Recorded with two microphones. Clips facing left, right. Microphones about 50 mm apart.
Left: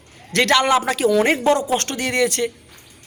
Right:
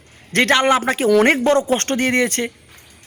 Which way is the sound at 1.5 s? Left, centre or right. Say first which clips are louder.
Right 3 dB; right.